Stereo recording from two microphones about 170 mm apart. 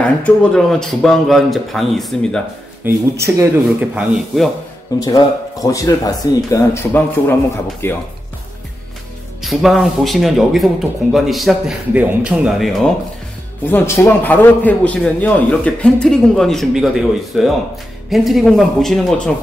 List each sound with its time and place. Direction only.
0.2 s speech: 5° left (ahead or behind)
2.8 s speech: 10° right (ahead or behind)
5.0 s a man's voice: 20° left (ahead or behind)
9.4 s speech: centre (ahead or behind)
13.7 s a man's voice: 15° left (ahead or behind)